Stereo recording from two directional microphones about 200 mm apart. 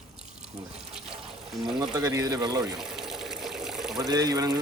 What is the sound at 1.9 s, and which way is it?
Speech, 20° right (ahead or behind).